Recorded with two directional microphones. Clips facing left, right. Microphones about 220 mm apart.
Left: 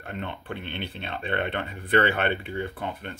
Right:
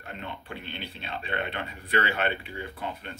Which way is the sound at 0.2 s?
55° left (ahead or behind).